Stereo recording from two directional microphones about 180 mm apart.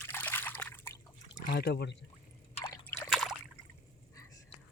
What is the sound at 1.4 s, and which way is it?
Speech, 60° left (ahead or behind).